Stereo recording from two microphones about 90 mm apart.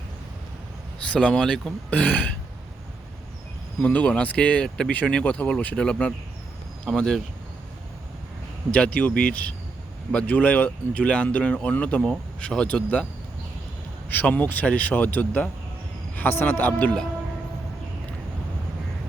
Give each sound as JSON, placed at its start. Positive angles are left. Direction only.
{"t": 1.1, "sound": "speech", "side_deg": 10}
{"t": 3.8, "sound": "speech", "side_deg": 15}
{"t": 8.7, "sound": "speech", "side_deg": 15}
{"t": 14.1, "sound": "speech", "side_deg": 20}